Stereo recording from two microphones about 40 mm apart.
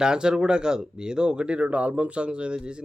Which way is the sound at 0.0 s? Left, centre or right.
Centre.